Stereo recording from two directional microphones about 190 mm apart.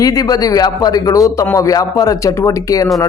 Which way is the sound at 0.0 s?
20° left (ahead or behind).